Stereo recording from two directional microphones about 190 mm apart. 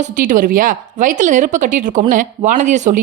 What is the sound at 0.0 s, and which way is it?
Speech, 45° right (ahead or behind).